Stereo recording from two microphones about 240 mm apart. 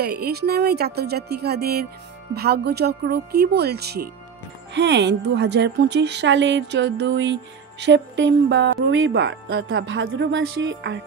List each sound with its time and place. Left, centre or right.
0.0 s a woman's voice: right